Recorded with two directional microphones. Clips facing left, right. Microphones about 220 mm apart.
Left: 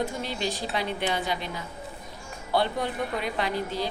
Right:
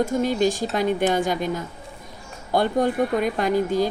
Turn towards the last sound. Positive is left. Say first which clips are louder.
# right 8 dB
turn(degrees=-45)  # may be behind; listen again after turning